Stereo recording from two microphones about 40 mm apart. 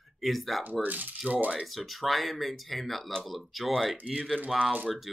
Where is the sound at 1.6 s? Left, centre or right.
Centre.